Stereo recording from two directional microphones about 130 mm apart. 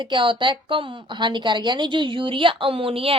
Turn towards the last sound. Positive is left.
turn(degrees=-45)  # may be behind; listen again after turning